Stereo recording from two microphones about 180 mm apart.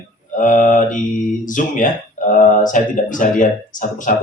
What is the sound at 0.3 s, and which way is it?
Speech, 45° left (ahead or behind).